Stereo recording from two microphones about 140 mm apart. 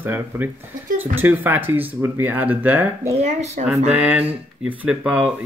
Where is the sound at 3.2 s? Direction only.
55° right (ahead or behind).